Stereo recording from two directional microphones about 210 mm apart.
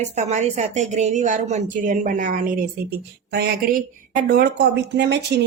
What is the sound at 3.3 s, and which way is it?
A woman's voice, 50° right (ahead or behind).